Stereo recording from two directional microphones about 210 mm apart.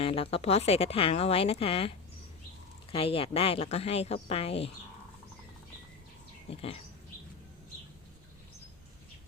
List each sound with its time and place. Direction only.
0.0 s speech: 25° left (ahead or behind)
2.9 s speech: 25° left (ahead or behind)
6.5 s speech: 25° left (ahead or behind)